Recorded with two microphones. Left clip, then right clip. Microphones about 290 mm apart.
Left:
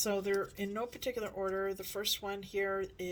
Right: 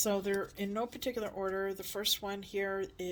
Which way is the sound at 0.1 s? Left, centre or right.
Right.